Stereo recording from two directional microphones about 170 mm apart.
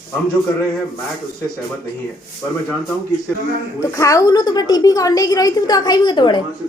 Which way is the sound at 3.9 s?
20° left (ahead or behind).